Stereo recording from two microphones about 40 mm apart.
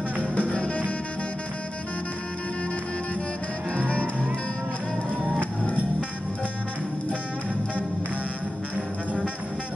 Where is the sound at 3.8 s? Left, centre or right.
Left.